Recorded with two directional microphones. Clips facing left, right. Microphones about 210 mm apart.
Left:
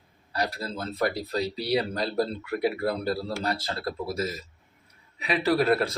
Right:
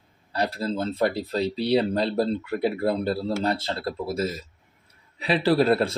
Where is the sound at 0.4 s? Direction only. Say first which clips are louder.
Right 5 dB; 25° right (ahead or behind).